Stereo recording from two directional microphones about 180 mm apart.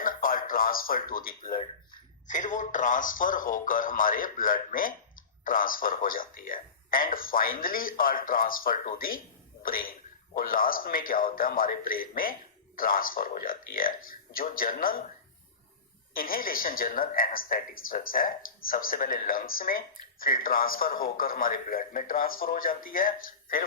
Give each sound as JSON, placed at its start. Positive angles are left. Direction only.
{"t": 0.0, "sound": "a sound", "side_deg": 50}
{"t": 1.5, "sound": "speech", "side_deg": 25}
{"t": 2.2, "sound": "a man's voice", "side_deg": 45}
{"t": 16.1, "sound": "a man's voice", "side_deg": 55}